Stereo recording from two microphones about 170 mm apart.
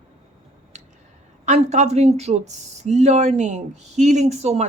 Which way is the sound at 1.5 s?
40° right (ahead or behind).